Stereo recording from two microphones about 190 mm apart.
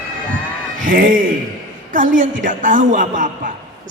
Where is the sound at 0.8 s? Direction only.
45° right (ahead or behind).